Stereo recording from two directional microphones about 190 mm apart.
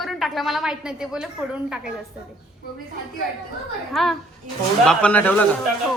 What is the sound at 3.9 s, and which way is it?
A man's voice, centre (ahead or behind).